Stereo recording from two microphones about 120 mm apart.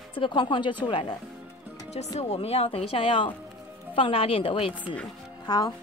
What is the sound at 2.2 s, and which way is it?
Speech, 55° left (ahead or behind).